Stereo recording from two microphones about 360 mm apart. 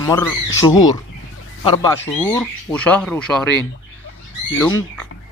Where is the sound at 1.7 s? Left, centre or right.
Centre.